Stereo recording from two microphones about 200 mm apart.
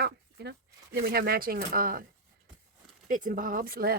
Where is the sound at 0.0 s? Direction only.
55° right (ahead or behind).